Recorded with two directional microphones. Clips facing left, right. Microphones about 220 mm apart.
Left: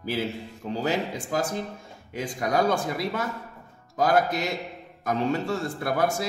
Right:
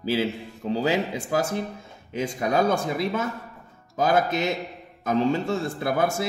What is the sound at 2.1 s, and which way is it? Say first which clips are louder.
A man's voice: right 2 dB; 25° right (ahead or behind).